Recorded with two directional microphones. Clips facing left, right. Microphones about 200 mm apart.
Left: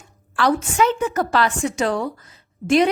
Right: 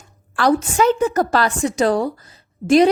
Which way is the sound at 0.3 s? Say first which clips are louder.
Right 2 dB; 40° right (ahead or behind).